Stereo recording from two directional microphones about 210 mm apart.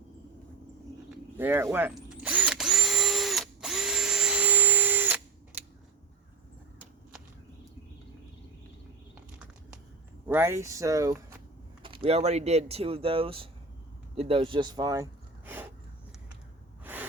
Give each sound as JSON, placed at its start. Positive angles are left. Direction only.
{"t": 1.1, "sound": "drill", "side_deg": -10}
{"t": 10.2, "sound": "speech", "side_deg": -10}
{"t": 16.8, "sound": "gasp", "side_deg": -10}